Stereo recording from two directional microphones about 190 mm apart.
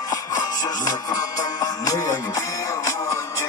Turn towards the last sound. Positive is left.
turn(degrees=15)  # may be behind; listen again after turning